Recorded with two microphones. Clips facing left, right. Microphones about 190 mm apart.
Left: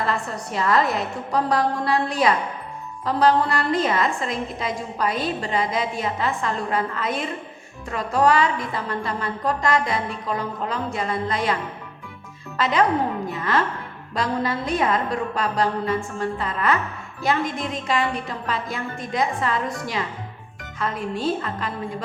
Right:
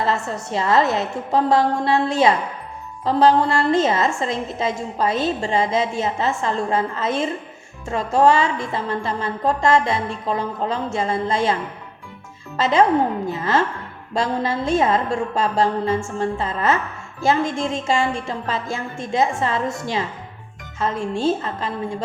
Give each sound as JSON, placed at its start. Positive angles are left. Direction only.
{"t": 0.0, "sound": "a woman's voice", "side_deg": -25}
{"t": 12.5, "sound": "a woman's voice", "side_deg": -25}